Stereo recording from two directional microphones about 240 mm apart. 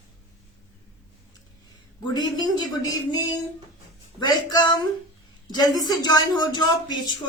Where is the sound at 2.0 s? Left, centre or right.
Centre.